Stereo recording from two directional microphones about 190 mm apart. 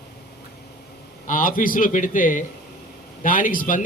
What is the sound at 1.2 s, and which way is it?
A man's voice, 45° left (ahead or behind).